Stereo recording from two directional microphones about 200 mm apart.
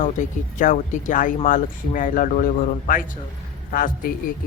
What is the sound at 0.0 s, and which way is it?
Speech, 40° left (ahead or behind).